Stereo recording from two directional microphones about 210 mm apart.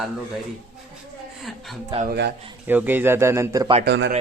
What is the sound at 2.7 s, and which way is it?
A man's voice, 10° right (ahead or behind).